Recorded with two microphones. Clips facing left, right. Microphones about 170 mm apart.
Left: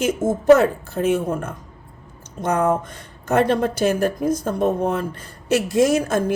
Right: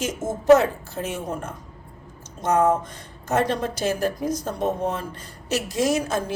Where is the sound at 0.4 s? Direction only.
55° left (ahead or behind).